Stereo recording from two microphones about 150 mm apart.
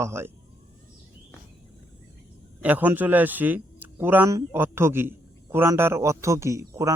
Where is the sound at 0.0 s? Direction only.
15° right (ahead or behind).